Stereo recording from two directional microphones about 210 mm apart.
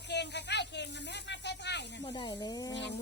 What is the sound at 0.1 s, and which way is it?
Snake, 55° left (ahead or behind).